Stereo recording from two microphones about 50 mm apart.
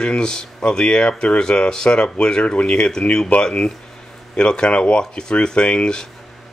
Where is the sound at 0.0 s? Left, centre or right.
Centre.